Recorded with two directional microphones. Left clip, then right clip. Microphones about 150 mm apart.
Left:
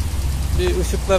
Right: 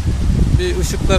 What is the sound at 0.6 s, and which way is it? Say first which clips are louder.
Speech: left 2 dB; 15° right (ahead or behind).